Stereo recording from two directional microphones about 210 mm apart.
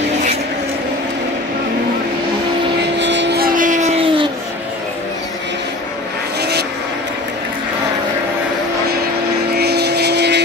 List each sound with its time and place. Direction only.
3.0 s vehicle: 55° right (ahead or behind); by 4.3 s 30° right (ahead or behind)
9.6 s vehicle: 50° right (ahead or behind)